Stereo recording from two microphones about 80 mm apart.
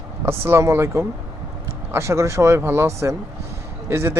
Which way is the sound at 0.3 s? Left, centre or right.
Right.